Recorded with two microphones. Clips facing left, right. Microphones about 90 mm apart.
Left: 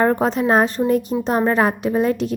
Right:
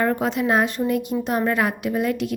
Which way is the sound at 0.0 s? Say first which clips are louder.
Left 4 dB; 35° left (ahead or behind).